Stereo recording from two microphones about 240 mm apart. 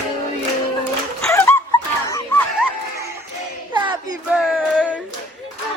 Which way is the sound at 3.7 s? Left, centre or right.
Centre.